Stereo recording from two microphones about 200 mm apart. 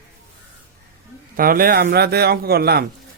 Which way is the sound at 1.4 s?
45° right (ahead or behind).